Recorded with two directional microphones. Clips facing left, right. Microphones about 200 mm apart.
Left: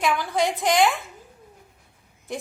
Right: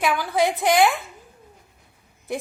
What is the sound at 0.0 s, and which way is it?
Speech, 5° right (ahead or behind).